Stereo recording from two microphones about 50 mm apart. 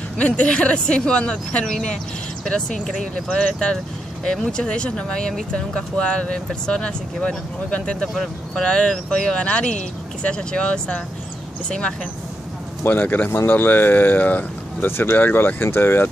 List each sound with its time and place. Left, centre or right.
0.2 s speech: left
2.8 s speech: centre
3.3 s speech: left
8.1 s speech: centre
8.6 s speech: centre
12.8 s speech: left
14.9 s speech: left